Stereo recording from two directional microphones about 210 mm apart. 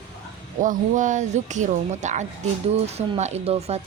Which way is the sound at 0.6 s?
40° right (ahead or behind).